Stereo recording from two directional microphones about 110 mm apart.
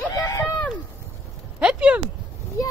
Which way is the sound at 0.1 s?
30° left (ahead or behind).